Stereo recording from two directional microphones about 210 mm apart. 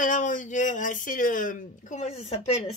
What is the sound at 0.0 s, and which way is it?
A woman's voice, 40° left (ahead or behind).